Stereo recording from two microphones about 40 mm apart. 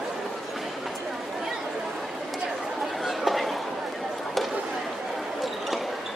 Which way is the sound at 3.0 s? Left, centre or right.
Centre.